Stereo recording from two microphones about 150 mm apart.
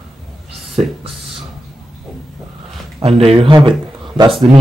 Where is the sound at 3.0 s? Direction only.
40° right (ahead or behind).